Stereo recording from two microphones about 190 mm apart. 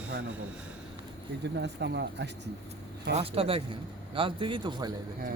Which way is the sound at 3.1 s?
30° right (ahead or behind).